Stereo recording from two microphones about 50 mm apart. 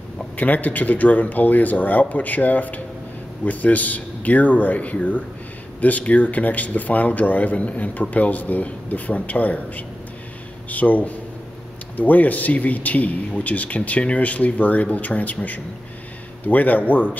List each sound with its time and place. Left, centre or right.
0.4 s speech: left